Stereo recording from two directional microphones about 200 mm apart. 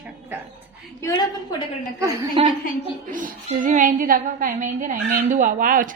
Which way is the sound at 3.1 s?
40° right (ahead or behind).